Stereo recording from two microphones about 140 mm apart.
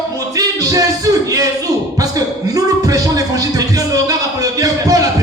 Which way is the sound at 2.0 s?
25° right (ahead or behind).